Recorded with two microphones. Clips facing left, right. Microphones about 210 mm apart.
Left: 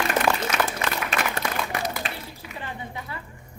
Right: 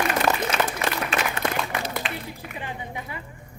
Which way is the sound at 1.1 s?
40° left (ahead or behind).